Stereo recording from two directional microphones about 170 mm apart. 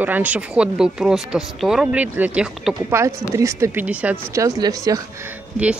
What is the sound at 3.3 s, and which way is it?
Speech, 15° right (ahead or behind).